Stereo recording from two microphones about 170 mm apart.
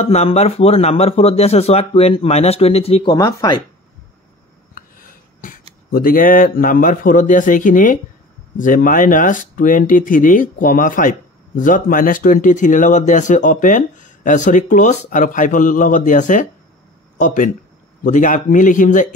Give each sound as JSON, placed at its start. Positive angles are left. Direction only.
{"t": 0.0, "sound": "speech", "side_deg": 40}
{"t": 4.7, "sound": "a sound", "side_deg": 55}
{"t": 5.9, "sound": "a man's voice", "side_deg": 60}